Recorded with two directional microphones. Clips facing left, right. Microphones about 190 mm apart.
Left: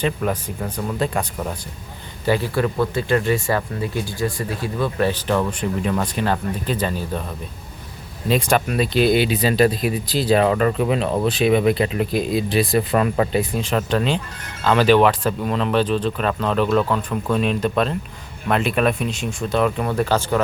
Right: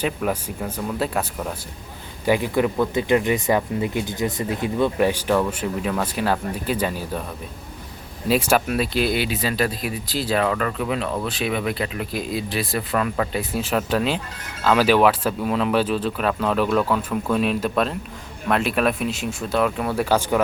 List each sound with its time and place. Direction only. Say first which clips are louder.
0.0 s speech: left 2 dB; 5° right (ahead or behind)
2.2 s speech: even; 15° right (ahead or behind)
8.3 s speech: even; 5° right (ahead or behind)
9.4 s speech: left 6 dB; 25° left (ahead or behind)
13.5 s speech: left 1 dB; 5° right (ahead or behind)